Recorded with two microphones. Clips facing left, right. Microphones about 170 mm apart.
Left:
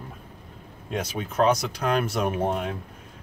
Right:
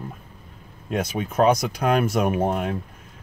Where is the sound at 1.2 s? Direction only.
10° right (ahead or behind).